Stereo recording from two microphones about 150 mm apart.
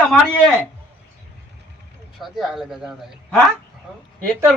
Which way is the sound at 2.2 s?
Centre (ahead or behind).